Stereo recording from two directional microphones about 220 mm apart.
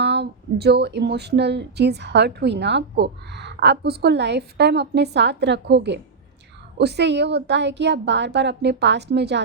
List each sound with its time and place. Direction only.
0.0 s speech: 50° right (ahead or behind)